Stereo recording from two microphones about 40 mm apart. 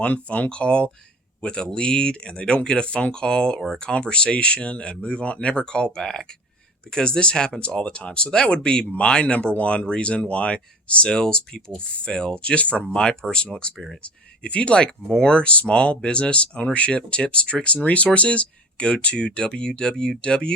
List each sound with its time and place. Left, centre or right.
0.0 s speech: left
12.8 s speech: left